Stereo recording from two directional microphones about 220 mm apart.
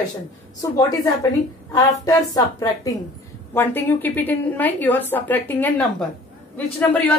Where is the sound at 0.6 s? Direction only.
15° left (ahead or behind).